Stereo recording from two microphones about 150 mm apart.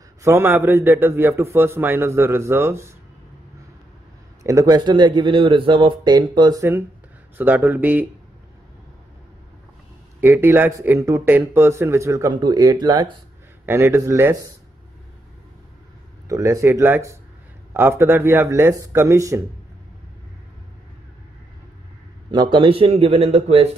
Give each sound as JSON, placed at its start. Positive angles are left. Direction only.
{"t": 0.2, "sound": "a man's voice", "side_deg": -15}
{"t": 4.4, "sound": "speech", "side_deg": -20}
{"t": 7.3, "sound": "a man's voice", "side_deg": -10}
{"t": 10.2, "sound": "speech", "side_deg": -15}
{"t": 13.7, "sound": "a man's voice", "side_deg": -15}
{"t": 16.3, "sound": "a man's voice", "side_deg": -20}
{"t": 22.3, "sound": "a man's voice", "side_deg": -30}